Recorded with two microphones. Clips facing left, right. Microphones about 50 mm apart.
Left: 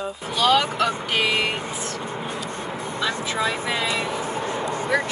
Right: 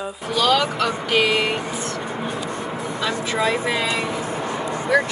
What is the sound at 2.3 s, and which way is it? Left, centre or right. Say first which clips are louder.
Vehicle: right 3 dB; right.